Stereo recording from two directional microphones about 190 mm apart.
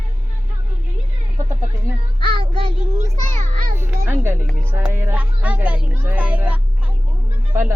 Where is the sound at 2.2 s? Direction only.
30° right (ahead or behind).